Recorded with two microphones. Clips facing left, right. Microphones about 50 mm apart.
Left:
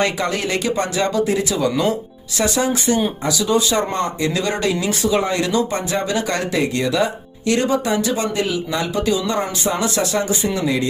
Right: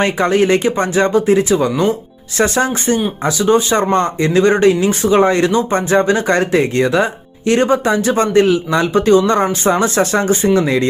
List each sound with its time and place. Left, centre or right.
0.0 s speech: right